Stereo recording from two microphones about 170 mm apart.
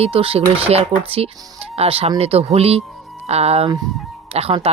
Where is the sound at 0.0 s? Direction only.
35° right (ahead or behind).